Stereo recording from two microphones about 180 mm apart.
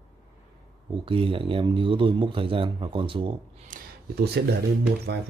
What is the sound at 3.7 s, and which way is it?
Speech, 65° right (ahead or behind).